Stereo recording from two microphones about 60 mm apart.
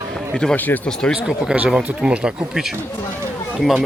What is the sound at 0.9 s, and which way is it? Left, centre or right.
Speech, centre.